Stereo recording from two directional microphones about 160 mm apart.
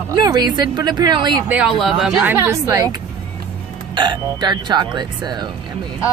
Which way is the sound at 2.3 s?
15° right (ahead or behind).